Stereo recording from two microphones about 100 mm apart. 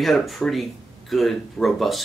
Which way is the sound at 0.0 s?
Centre (ahead or behind).